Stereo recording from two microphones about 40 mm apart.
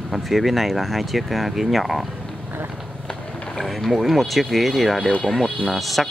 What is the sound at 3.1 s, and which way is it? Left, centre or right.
Run, left.